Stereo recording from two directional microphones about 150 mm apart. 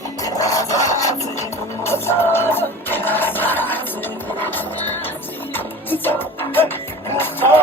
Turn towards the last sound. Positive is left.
turn(degrees=15)  # may be behind; listen again after turning